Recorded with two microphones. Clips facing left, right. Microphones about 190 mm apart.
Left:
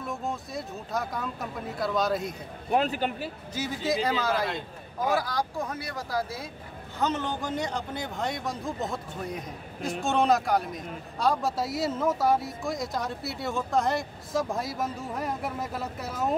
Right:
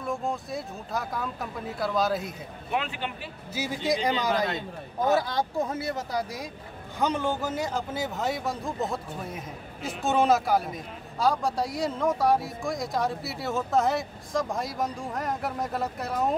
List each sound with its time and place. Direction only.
0.0 s speech: centre (ahead or behind)
2.7 s speech: 40° left (ahead or behind)
3.5 s a man's voice: 10° right (ahead or behind)
4.3 s speech: centre (ahead or behind)
5.0 s speech: 25° right (ahead or behind); by 16.3 s centre (ahead or behind)